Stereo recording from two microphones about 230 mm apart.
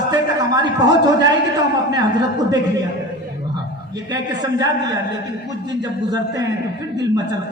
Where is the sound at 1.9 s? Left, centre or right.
Centre.